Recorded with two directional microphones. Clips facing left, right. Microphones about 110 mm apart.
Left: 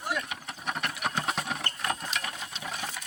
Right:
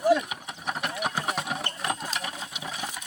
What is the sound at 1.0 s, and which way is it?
Engine, 10° right (ahead or behind).